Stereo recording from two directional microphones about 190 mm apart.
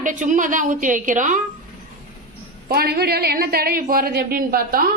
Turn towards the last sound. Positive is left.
turn(degrees=-50)  # may be behind; listen again after turning